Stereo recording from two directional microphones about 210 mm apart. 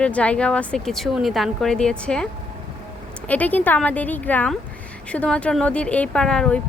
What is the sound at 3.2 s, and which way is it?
A woman's voice, 5° left (ahead or behind).